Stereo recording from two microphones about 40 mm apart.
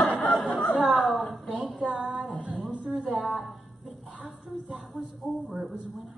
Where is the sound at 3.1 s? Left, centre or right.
Centre.